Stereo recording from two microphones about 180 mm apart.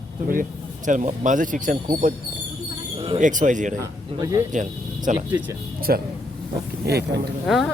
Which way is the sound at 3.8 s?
15° right (ahead or behind).